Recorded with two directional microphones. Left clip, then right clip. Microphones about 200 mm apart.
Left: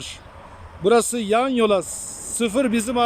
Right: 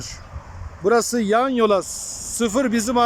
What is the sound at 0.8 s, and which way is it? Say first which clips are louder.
Speech: left 1 dB; 20° left (ahead or behind).